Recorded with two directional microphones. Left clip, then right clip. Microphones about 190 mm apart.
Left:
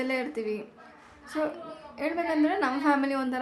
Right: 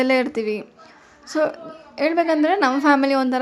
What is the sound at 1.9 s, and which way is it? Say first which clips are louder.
Speech: right 10 dB; 40° right (ahead or behind).